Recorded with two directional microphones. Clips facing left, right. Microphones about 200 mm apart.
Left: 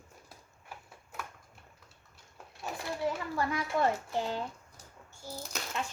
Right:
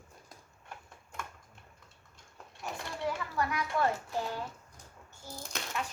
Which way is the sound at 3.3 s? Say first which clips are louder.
Even; 25° left (ahead or behind).